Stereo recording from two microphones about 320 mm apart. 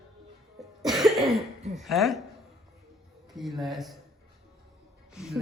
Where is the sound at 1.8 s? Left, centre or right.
Centre.